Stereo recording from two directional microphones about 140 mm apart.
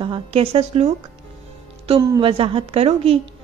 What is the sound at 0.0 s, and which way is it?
Speech, 40° right (ahead or behind).